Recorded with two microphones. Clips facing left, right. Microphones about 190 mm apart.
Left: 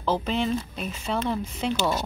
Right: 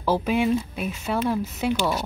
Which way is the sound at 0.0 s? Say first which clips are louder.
Right 3 dB; 10° right (ahead or behind).